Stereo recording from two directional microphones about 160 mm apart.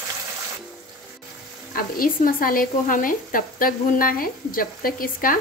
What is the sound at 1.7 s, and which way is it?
Speech, 65° left (ahead or behind).